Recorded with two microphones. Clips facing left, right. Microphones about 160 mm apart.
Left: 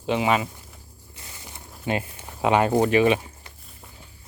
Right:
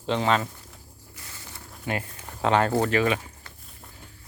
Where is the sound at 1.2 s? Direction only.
20° left (ahead or behind).